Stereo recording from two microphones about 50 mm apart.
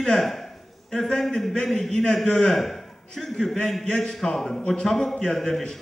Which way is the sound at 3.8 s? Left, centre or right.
Centre.